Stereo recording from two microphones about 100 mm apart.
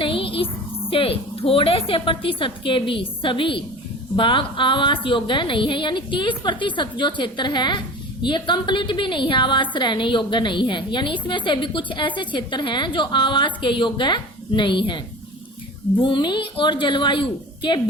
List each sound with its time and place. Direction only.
0.0 s a woman's voice: 65° left (ahead or behind)